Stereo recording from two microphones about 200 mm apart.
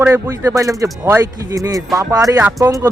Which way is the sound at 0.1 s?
15° right (ahead or behind).